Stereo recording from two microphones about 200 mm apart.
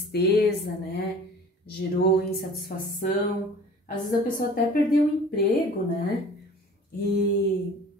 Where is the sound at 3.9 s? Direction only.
40° left (ahead or behind).